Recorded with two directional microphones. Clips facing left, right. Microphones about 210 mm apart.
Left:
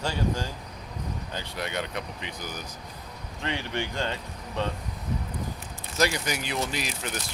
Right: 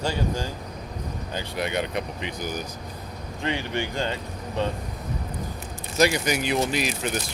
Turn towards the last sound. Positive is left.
turn(degrees=-15)  # may be behind; listen again after turning